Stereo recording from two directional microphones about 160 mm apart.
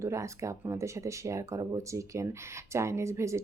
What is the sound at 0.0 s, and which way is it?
Speech, 20° right (ahead or behind).